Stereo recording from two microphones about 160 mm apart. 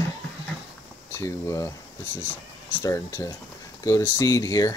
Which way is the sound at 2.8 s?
20° left (ahead or behind).